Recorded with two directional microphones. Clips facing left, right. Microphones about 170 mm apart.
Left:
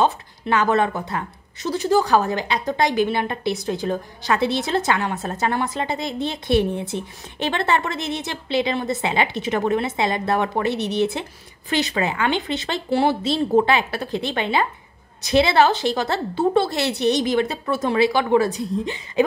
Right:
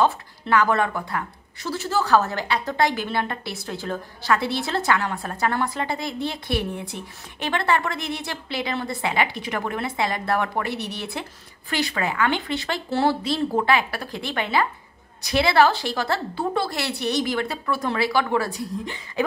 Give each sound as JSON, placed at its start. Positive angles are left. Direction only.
{"t": 0.0, "sound": "a woman's voice", "side_deg": 20}